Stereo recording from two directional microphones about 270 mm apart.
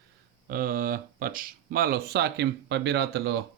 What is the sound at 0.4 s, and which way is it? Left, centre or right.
Speech, right.